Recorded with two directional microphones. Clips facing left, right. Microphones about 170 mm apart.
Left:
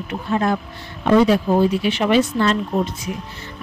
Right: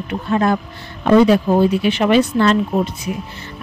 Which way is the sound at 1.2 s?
60° right (ahead or behind).